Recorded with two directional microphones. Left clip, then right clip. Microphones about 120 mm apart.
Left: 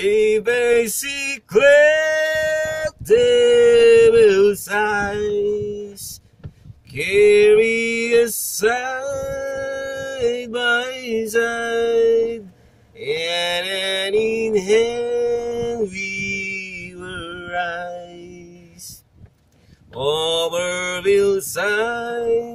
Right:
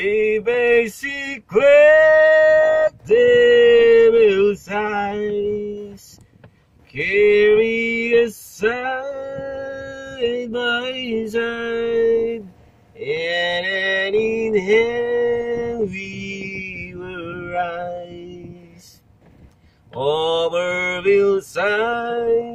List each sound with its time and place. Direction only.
0.0 s male singing: 30° left (ahead or behind)
6.9 s a sound: 35° left (ahead or behind)
13.0 s music: 25° left (ahead or behind)
19.9 s mantra: 20° left (ahead or behind)